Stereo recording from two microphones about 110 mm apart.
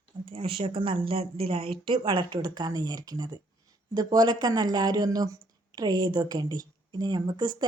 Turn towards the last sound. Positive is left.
turn(degrees=-40)  # may be behind; listen again after turning